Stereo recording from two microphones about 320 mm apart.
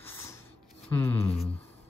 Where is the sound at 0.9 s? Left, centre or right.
Centre.